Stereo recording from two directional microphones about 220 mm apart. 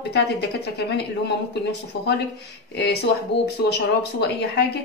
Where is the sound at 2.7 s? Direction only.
50° left (ahead or behind).